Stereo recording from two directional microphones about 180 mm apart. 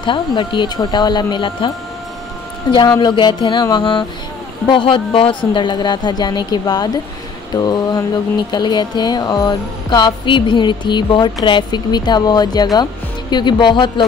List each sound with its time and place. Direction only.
0.0 s speech: 25° left (ahead or behind)
2.7 s speech: 25° left (ahead or behind)